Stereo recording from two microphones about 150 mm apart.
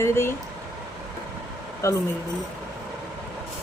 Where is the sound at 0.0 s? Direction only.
15° left (ahead or behind).